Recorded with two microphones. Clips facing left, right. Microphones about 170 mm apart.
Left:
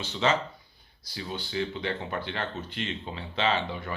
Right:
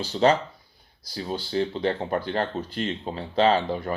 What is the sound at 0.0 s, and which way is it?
Speech, 35° right (ahead or behind).